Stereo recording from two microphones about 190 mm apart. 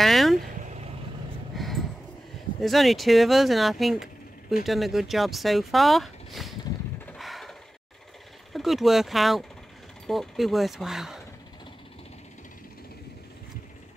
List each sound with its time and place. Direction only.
0.0 s vehicle: centre (ahead or behind)
0.4 s vehicle: 40° right (ahead or behind)
1.5 s a sound: centre (ahead or behind)
2.6 s speech: centre (ahead or behind)
7.1 s a sound: centre (ahead or behind)
8.5 s speech: centre (ahead or behind)